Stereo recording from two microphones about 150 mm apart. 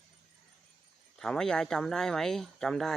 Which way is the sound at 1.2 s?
5° left (ahead or behind).